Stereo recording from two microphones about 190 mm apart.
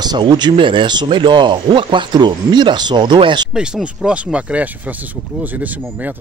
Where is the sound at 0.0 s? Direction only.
20° right (ahead or behind).